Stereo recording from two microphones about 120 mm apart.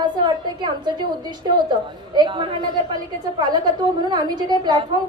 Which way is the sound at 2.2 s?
40° right (ahead or behind).